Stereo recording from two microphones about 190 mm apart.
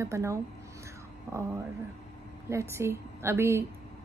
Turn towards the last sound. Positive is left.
turn(degrees=-15)  # may be behind; listen again after turning